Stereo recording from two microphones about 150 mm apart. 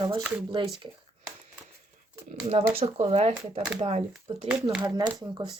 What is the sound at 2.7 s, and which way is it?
Speech, 45° right (ahead or behind).